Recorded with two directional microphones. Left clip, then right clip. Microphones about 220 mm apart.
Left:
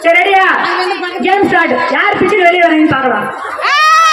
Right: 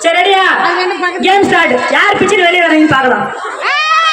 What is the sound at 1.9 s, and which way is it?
Speech, 35° right (ahead or behind).